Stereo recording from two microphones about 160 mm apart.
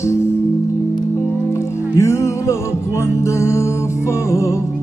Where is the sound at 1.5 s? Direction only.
15° left (ahead or behind).